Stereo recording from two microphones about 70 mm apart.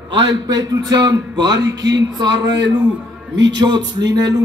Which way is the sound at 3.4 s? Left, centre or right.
Right.